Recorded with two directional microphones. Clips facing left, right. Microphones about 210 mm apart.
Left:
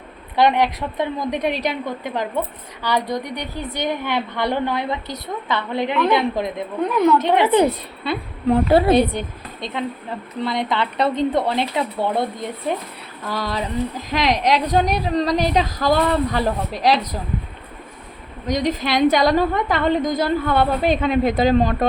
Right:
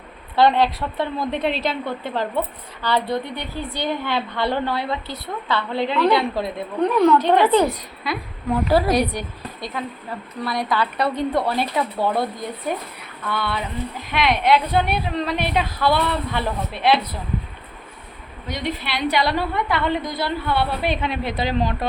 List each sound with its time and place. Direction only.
0.3 s a woman's voice: 15° left (ahead or behind)
13.2 s a woman's voice: 35° left (ahead or behind)
18.4 s a woman's voice: 40° left (ahead or behind)